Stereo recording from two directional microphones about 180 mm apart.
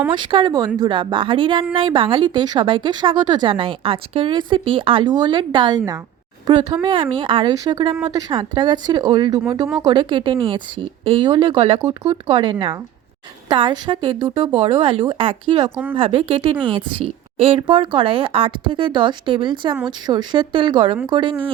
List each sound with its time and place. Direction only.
0.1 s speech: 25° right (ahead or behind)